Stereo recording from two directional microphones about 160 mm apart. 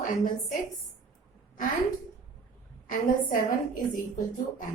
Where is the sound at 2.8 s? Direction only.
55° left (ahead or behind).